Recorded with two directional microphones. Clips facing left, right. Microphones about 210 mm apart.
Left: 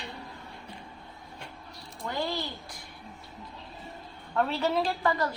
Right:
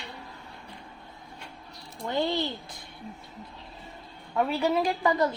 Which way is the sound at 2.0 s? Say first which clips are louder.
Right 5 dB; 25° right (ahead or behind).